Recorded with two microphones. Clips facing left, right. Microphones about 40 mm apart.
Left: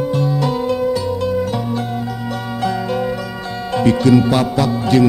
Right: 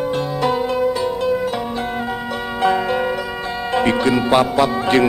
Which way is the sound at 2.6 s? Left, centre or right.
Right.